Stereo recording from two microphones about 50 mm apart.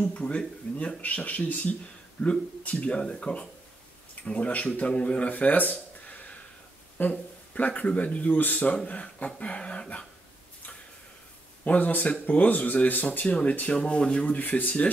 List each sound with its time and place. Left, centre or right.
0.1 s speech: left
5.3 s a sound: left
7.0 s speech: left
11.6 s speech: left
13.2 s speech: left
14.4 s speech: left